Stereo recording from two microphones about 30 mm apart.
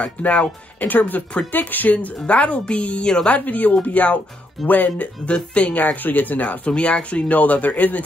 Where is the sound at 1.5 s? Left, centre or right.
Left.